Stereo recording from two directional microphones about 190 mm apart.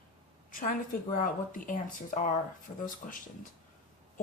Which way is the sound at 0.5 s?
45° left (ahead or behind).